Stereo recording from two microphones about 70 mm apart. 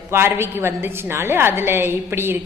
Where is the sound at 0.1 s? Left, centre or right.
Right.